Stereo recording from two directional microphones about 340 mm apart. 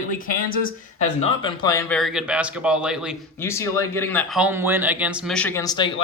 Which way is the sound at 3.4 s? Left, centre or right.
Centre.